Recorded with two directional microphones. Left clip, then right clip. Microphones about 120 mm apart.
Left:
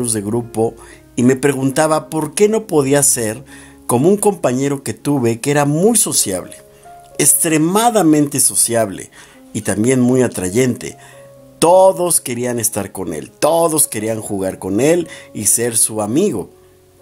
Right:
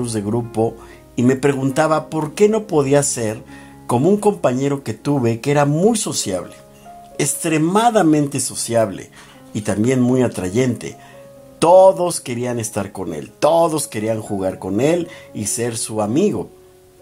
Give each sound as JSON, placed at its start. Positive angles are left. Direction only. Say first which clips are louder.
{"t": 0.0, "sound": "speech", "louder": "left 2 dB", "side_deg": 35}